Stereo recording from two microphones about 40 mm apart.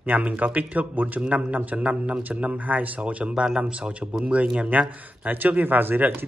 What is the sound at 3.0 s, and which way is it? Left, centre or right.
Speech, right.